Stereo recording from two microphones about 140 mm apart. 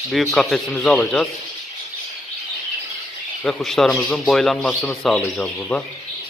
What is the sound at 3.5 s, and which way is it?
A man's voice, 5° left (ahead or behind).